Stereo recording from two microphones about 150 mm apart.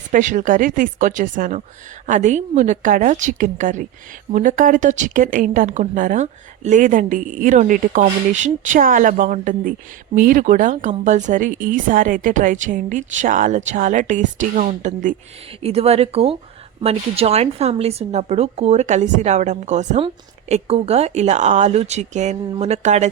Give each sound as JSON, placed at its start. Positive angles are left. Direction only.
{"t": 0.1, "sound": "a woman's voice", "side_deg": -60}
{"t": 15.6, "sound": "a woman's voice", "side_deg": -40}
{"t": 20.5, "sound": "a woman's voice", "side_deg": -40}